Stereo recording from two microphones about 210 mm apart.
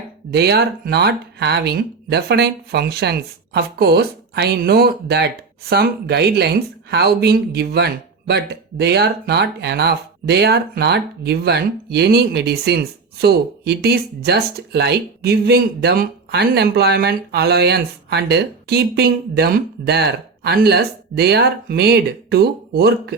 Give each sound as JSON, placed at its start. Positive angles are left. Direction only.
{"t": 0.3, "sound": "speech", "side_deg": -50}